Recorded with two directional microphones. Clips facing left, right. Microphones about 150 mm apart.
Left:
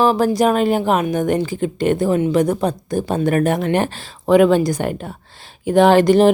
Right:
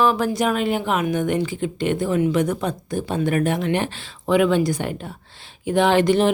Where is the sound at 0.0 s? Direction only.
35° left (ahead or behind).